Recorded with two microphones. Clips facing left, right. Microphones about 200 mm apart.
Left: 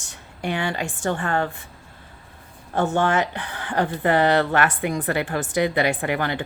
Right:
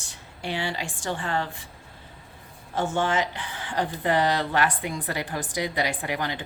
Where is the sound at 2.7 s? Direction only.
60° left (ahead or behind).